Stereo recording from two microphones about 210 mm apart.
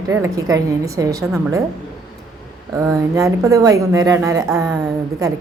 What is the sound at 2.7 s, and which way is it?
Speech, 15° right (ahead or behind).